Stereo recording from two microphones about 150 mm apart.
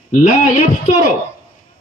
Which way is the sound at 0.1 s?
55° left (ahead or behind).